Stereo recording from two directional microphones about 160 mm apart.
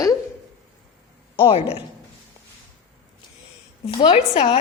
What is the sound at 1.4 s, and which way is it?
Speech, 35° left (ahead or behind).